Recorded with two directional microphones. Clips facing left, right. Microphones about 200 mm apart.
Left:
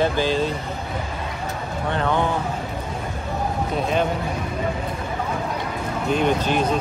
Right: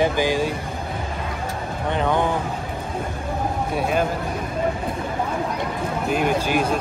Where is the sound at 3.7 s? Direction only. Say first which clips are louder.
Even; 5° right (ahead or behind).